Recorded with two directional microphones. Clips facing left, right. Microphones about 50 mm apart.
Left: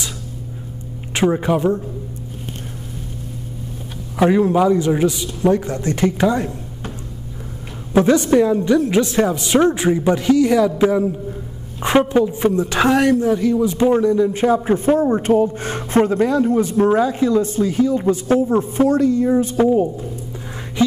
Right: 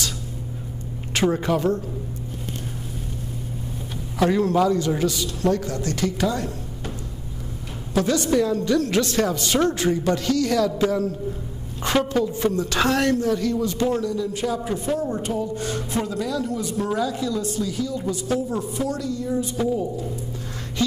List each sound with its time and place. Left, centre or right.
1.1 s a woman's voice: centre
4.2 s a woman's voice: left
7.9 s a woman's voice: left